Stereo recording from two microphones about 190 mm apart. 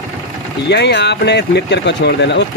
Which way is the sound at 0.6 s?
65° left (ahead or behind).